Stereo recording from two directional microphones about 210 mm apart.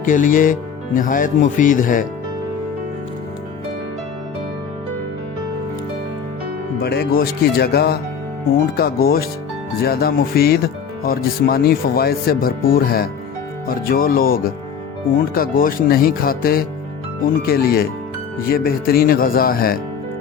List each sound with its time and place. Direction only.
0.0 s speech: 40° left (ahead or behind)
6.8 s speech: 50° left (ahead or behind)